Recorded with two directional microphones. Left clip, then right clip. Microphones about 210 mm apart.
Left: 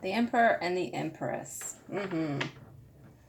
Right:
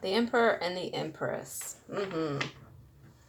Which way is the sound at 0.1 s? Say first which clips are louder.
Left 1 dB; 30° right (ahead or behind).